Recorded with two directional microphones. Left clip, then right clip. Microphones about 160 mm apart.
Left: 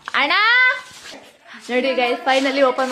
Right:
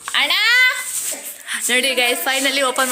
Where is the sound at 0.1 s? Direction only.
35° left (ahead or behind).